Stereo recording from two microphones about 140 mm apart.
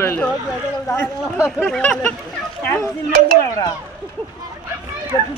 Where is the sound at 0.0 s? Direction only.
15° left (ahead or behind).